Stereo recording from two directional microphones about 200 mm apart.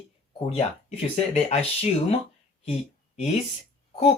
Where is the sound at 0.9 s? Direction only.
30° left (ahead or behind).